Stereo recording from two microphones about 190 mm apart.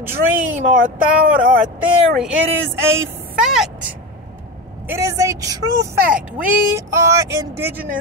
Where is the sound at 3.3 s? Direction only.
Centre (ahead or behind).